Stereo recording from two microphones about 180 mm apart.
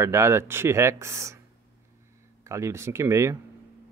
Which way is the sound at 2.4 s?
15° right (ahead or behind).